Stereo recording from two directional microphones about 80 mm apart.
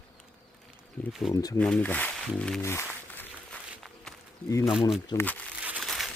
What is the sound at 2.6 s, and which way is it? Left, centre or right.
Speech, left.